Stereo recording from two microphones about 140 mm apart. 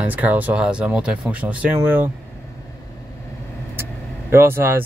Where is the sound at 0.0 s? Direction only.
10° right (ahead or behind).